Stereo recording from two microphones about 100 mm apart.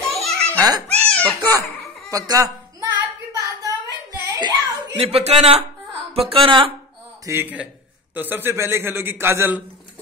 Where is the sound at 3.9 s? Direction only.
40° right (ahead or behind).